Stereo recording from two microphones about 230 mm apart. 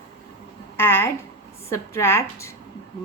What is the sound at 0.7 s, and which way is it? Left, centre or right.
A woman's voice, centre.